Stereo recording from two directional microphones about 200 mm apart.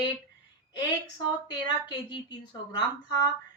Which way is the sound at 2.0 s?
20° left (ahead or behind).